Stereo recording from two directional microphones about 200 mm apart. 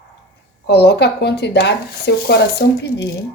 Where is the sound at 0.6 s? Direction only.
55° left (ahead or behind).